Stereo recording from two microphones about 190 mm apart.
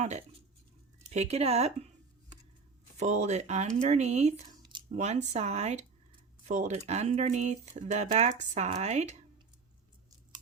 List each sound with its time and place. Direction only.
1.1 s speech: 35° right (ahead or behind)
3.0 s speech: 35° right (ahead or behind)
4.4 s a sound: 20° right (ahead or behind)
4.9 s speech: 35° right (ahead or behind)